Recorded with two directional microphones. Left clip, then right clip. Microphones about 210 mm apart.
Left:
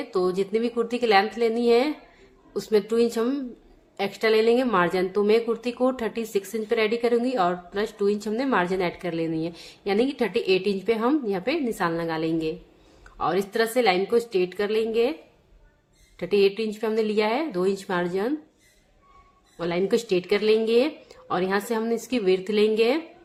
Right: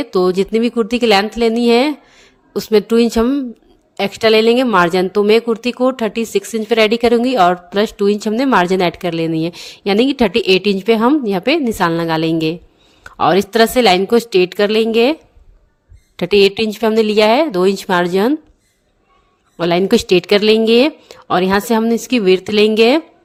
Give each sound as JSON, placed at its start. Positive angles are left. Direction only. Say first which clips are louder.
{"t": 0.0, "sound": "a woman's voice", "louder": "right 10 dB", "side_deg": -40}
{"t": 16.1, "sound": "a woman's voice", "louder": "right 10 dB", "side_deg": -45}
{"t": 19.5, "sound": "a woman's voice", "louder": "right 10 dB", "side_deg": -45}